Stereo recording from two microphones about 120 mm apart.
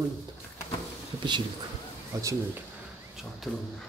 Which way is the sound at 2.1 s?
30° right (ahead or behind).